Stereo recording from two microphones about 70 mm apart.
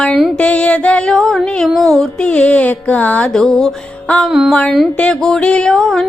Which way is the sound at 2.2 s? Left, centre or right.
Centre.